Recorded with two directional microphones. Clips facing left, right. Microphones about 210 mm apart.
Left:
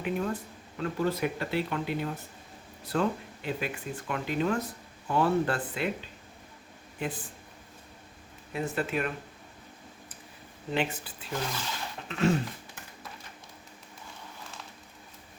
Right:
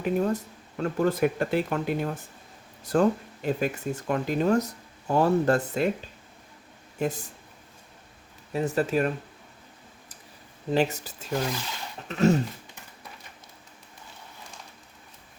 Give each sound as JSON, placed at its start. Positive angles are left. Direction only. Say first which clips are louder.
{"t": 0.0, "sound": "speech", "louder": "right 6 dB", "side_deg": -40}
{"t": 7.0, "sound": "speech", "louder": "right 6 dB", "side_deg": -45}
{"t": 8.5, "sound": "speech", "louder": "right 6 dB", "side_deg": -40}
{"t": 10.7, "sound": "speech", "louder": "right 6 dB", "side_deg": -40}